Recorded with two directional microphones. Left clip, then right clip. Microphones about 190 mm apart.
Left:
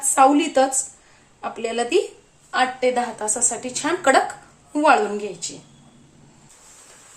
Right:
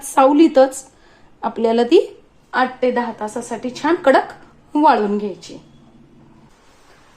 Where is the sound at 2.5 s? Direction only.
30° right (ahead or behind).